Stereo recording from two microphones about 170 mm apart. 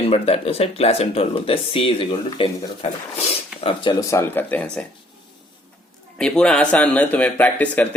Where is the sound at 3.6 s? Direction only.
25° left (ahead or behind).